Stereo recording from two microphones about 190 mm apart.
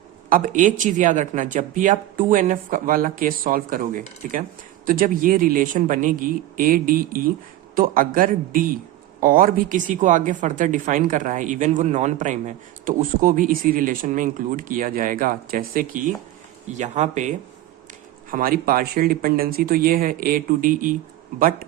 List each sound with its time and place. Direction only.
0.3 s speech: 45° right (ahead or behind)